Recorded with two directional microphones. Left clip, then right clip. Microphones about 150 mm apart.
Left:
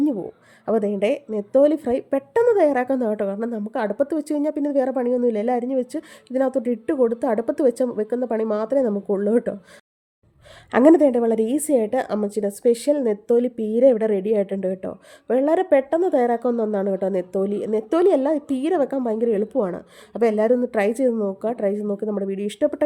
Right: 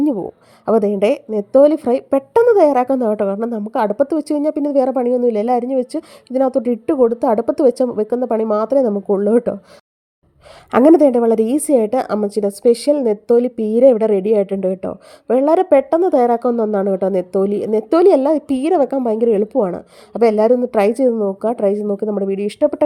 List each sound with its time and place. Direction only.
0.0 s a woman's voice: 35° right (ahead or behind)
10.7 s a woman's voice: 35° right (ahead or behind)